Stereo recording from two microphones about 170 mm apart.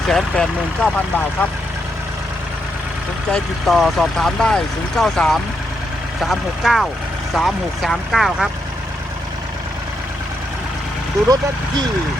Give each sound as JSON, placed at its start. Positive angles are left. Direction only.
{"t": 0.1, "sound": "speech", "side_deg": 5}
{"t": 3.3, "sound": "speech", "side_deg": 0}